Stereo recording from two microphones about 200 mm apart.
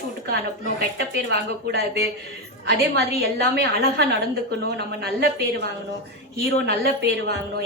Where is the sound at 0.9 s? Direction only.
55° right (ahead or behind).